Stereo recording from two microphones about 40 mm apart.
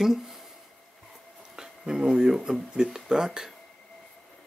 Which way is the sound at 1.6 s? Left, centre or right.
Centre.